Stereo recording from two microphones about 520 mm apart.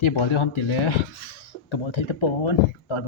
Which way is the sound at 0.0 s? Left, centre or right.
Left.